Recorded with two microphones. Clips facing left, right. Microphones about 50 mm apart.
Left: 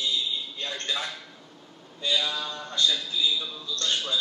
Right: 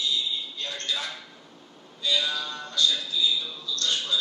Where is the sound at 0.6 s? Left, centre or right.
Left.